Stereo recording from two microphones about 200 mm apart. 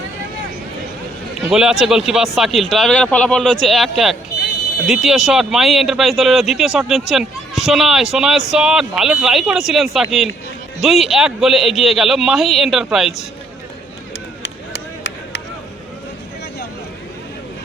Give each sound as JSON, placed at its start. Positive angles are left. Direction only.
{"t": 1.5, "sound": "speech", "side_deg": 0}
{"t": 14.4, "sound": "chop", "side_deg": 65}